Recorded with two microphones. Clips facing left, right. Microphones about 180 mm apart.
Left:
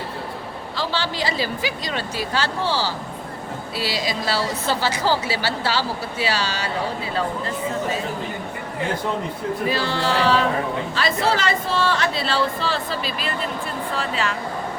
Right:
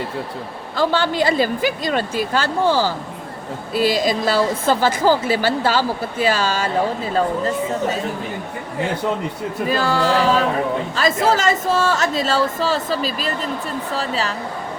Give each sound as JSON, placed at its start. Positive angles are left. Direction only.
{"t": 0.8, "sound": "a woman's voice", "side_deg": -50}
{"t": 9.6, "sound": "a woman's voice", "side_deg": -45}